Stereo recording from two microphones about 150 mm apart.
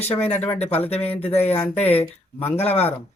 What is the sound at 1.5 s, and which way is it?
Speech, 45° left (ahead or behind).